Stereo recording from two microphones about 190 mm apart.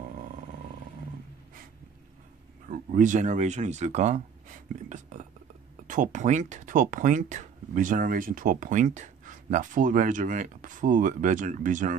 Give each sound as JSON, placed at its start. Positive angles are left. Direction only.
{"t": 2.7, "sound": "speech", "side_deg": -45}